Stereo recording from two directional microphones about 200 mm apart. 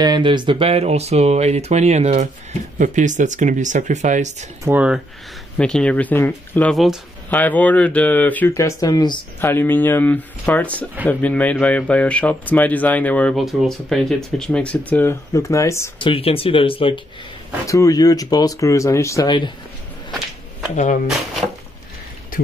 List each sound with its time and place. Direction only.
0.0 s speech: 20° right (ahead or behind)
4.6 s speech: 5° right (ahead or behind)
5.6 s speech: 5° left (ahead or behind)
16.0 s speech: 25° left (ahead or behind)
17.6 s speech: 15° left (ahead or behind)
20.7 s speech: 40° left (ahead or behind)